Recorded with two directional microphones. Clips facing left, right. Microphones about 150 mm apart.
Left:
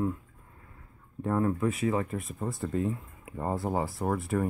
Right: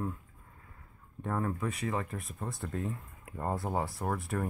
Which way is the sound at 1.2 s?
Centre (ahead or behind).